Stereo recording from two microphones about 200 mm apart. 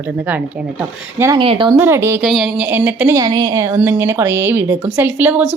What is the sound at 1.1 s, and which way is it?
Speech, 10° right (ahead or behind).